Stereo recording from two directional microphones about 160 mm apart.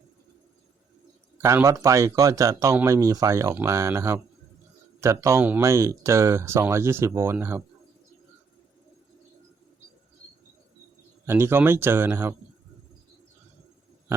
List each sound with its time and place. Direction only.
1.4 s speech: 15° right (ahead or behind)
11.3 s speech: 15° right (ahead or behind)